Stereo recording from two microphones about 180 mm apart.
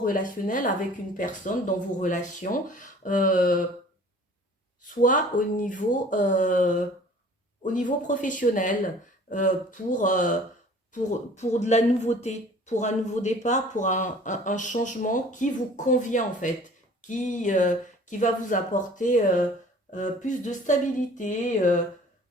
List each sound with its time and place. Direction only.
0.0 s speech: 50° left (ahead or behind)
4.8 s speech: 45° left (ahead or behind)